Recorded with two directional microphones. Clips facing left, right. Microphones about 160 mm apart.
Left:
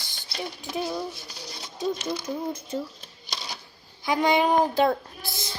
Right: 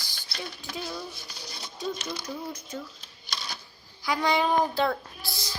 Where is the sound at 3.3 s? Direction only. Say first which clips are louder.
Left 1 dB; 20° left (ahead or behind).